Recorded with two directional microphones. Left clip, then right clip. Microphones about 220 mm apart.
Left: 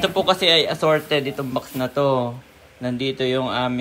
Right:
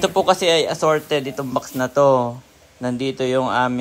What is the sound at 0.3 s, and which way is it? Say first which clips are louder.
Speech: left 1 dB; 40° right (ahead or behind).